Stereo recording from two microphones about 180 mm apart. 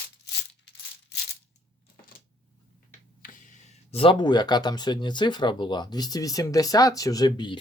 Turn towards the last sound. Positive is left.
turn(degrees=25)  # may be behind; listen again after turning